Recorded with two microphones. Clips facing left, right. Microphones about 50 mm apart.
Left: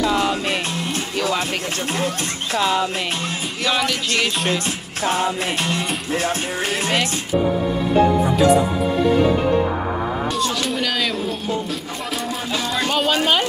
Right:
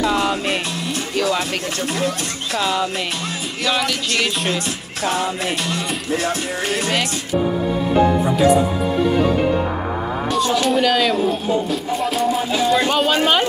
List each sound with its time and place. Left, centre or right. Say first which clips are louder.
0.0 s music: right 1 dB; right
5.0 s music: even; left
10.3 s speech: right 5 dB; centre